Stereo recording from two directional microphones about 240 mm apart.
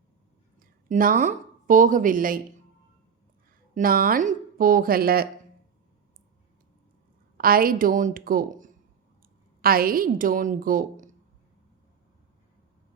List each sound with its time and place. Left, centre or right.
0.6 s a woman's voice: right
3.8 s a woman's voice: right
7.3 s a woman's voice: right